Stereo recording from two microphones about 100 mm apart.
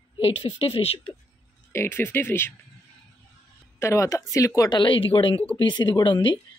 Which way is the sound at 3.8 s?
30° left (ahead or behind).